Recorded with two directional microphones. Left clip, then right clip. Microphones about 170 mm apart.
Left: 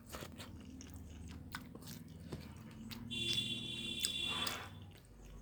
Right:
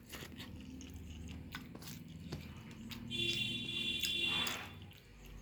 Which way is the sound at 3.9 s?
35° left (ahead or behind).